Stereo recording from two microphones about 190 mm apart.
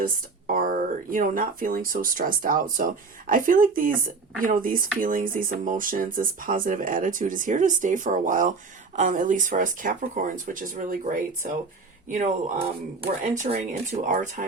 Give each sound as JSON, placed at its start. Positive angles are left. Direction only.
{"t": 0.0, "sound": "speech", "side_deg": -50}